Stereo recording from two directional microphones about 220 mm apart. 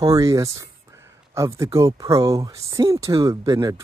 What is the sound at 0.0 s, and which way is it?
Speech, 15° right (ahead or behind).